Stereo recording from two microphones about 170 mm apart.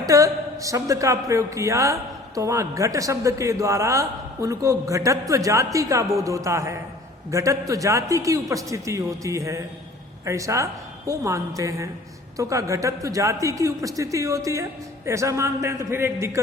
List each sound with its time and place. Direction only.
0.1 s a woman's voice: 20° right (ahead or behind)